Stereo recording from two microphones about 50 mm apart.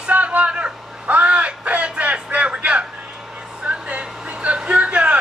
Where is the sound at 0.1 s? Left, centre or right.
Right.